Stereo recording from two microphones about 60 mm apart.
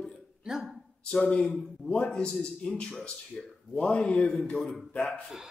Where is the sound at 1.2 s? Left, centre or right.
Centre.